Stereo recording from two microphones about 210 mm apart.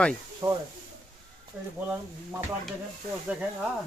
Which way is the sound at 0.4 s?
20° right (ahead or behind).